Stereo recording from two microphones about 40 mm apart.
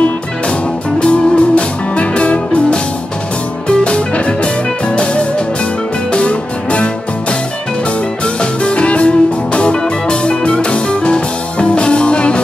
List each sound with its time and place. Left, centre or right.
0.9 s music: left
8.4 s music: left